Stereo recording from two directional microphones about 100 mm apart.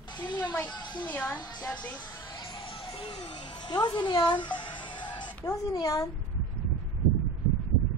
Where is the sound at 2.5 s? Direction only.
60° left (ahead or behind).